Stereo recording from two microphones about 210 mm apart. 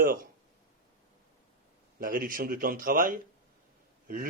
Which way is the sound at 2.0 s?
40° right (ahead or behind).